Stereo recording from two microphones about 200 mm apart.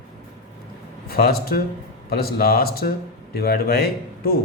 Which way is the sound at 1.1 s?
50° left (ahead or behind).